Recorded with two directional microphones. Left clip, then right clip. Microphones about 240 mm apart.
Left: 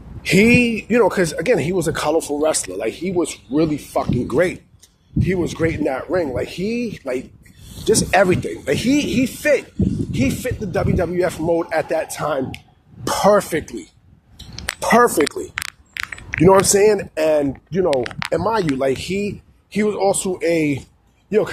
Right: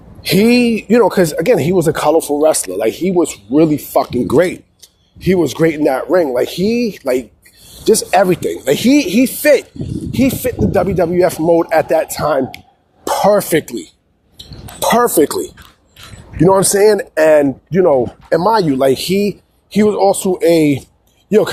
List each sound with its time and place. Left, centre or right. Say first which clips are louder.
0.2 s speech: right 2 dB; right
13.1 s throat clearing: right 3 dB; centre
13.5 s speech: right 8 dB; right
16.4 s speech: right 3 dB; centre
18.9 s speech: right 7 dB; right